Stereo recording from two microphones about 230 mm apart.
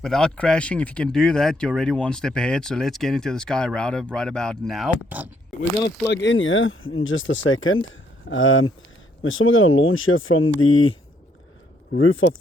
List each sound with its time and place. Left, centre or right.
0.0 s speech: centre
6.1 s speech: left